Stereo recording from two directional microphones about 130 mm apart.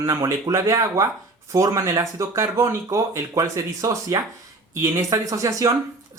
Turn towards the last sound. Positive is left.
turn(degrees=-25)  # may be behind; listen again after turning